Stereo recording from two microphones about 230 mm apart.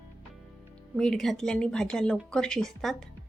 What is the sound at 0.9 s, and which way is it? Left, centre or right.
A woman's voice, centre.